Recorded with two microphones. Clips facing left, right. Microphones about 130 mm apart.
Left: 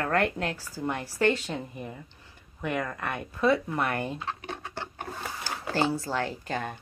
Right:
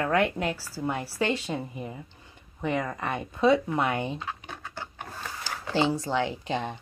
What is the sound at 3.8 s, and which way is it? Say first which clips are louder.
Speech: right 2 dB; 20° right (ahead or behind).